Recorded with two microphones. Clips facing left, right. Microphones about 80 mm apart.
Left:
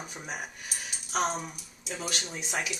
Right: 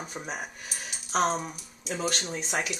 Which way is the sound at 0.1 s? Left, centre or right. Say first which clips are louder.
Right 2 dB; right.